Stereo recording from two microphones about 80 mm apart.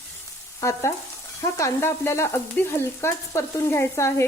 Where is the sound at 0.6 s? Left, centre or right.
Left.